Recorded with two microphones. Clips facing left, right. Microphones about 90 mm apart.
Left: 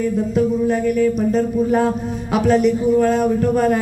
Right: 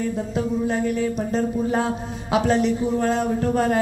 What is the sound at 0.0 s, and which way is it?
A woman's voice, 25° right (ahead or behind).